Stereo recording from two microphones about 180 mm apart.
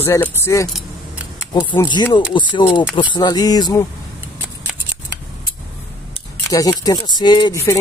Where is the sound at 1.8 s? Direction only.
25° left (ahead or behind).